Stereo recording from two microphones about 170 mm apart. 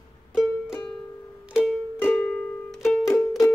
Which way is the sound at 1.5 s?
10° left (ahead or behind).